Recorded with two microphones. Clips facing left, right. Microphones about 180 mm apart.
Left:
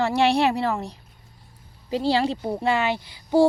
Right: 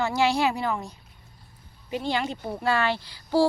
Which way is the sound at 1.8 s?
30° left (ahead or behind).